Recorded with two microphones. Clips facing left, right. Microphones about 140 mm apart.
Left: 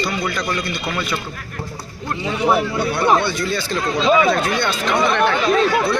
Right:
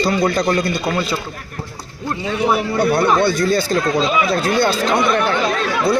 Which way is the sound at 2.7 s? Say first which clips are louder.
Right 2 dB; 40° right (ahead or behind).